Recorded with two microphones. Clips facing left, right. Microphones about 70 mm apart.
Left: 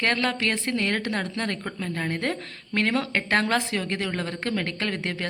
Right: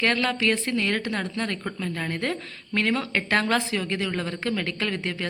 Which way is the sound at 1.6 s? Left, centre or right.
Left.